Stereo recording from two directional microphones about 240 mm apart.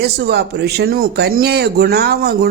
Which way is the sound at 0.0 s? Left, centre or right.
Right.